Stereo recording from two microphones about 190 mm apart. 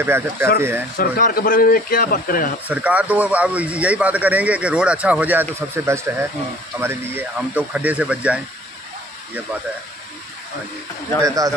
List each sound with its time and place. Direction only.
0.0 s speech: 10° right (ahead or behind)
0.9 s speech: 50° left (ahead or behind)
2.7 s speech: 5° right (ahead or behind)
11.2 s speech: 15° right (ahead or behind)